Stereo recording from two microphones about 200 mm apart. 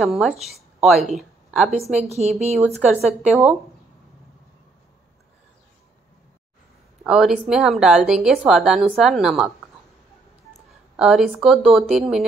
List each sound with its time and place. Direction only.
0.0 s a woman's voice: centre (ahead or behind)
1.7 s a woman's voice: 30° right (ahead or behind)
2.5 s speech: 5° right (ahead or behind)
7.1 s speech: centre (ahead or behind)
11.0 s speech: 5° right (ahead or behind)